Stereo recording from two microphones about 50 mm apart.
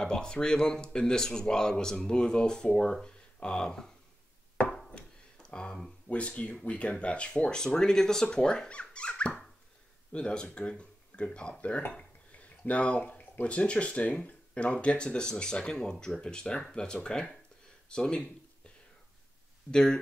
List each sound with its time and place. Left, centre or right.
0.0 s speech: centre
4.6 s chopping: centre
4.9 s tick-tock: centre
6.0 s speech: left
12.4 s a sound: left
13.5 s speech: left
19.7 s speech: centre